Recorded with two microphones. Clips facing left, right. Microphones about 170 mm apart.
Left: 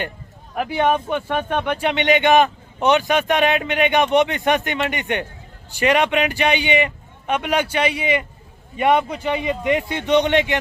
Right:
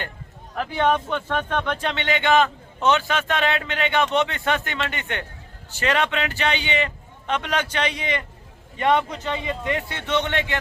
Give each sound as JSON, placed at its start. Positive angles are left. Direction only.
{"t": 0.5, "sound": "speech", "side_deg": 15}